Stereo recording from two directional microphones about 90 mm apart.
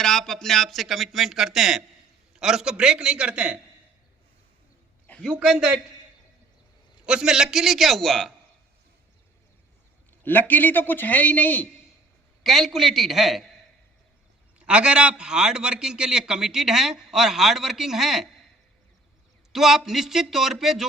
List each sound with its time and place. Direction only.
0.0 s a man's voice: 5° left (ahead or behind); by 3.6 s 15° right (ahead or behind)
5.3 s a man's voice: 10° right (ahead or behind)
7.0 s speech: 10° right (ahead or behind)
10.2 s a man's voice: 20° left (ahead or behind)
12.4 s speech: centre (ahead or behind)
14.6 s a man's voice: 10° right (ahead or behind)
19.5 s speech: 5° right (ahead or behind)